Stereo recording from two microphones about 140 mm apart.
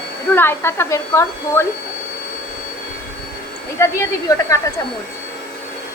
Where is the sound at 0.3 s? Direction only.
15° left (ahead or behind).